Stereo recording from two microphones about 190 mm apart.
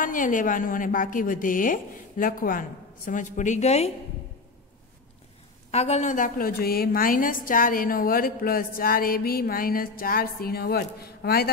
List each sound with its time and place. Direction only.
0.0 s a woman's voice: 45° left (ahead or behind)
5.7 s a woman's voice: 35° left (ahead or behind); by 11.5 s 55° left (ahead or behind)